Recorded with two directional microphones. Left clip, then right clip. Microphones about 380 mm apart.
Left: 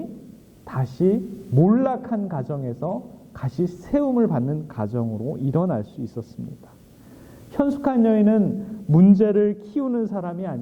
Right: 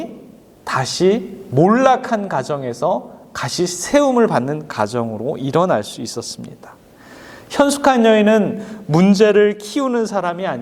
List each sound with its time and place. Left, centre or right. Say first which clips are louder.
0.6 s a man's voice: right 7 dB; centre
2.8 s speech: right 12 dB; centre
3.3 s a man's voice: right 8 dB; centre
5.0 s speech: right 7 dB; centre
5.5 s a man's voice: right 10 dB; centre
7.5 s a man's voice: right 9 dB; centre